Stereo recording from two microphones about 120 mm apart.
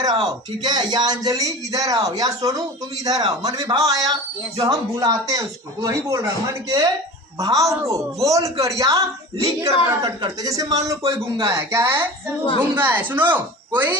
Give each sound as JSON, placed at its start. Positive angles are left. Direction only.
{"t": 0.0, "sound": "a man's voice", "side_deg": -35}